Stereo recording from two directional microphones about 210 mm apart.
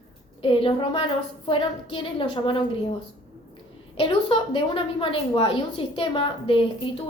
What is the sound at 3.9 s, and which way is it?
A woman's voice, 25° left (ahead or behind).